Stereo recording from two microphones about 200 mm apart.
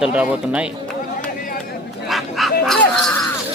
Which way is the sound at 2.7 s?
Centre (ahead or behind).